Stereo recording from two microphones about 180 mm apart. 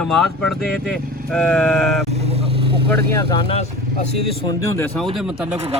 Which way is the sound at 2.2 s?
35° right (ahead or behind).